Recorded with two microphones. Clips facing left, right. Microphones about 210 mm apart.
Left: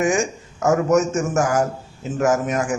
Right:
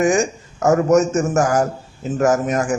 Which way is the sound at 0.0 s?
35° right (ahead or behind).